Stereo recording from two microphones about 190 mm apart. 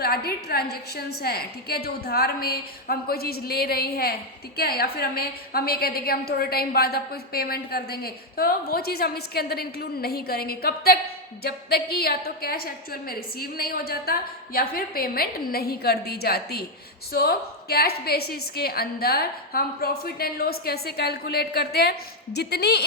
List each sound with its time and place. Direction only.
0.0 s a woman's voice: 55° left (ahead or behind)